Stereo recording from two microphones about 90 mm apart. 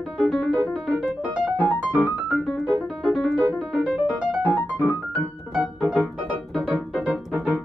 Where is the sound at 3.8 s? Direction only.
15° right (ahead or behind).